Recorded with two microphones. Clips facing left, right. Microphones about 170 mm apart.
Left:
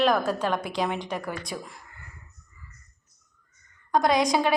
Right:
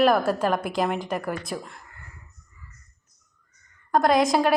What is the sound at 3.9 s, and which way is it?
Speech, centre (ahead or behind).